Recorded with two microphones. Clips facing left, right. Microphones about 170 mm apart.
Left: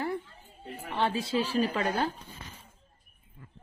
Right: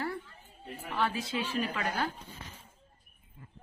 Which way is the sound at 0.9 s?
25° left (ahead or behind).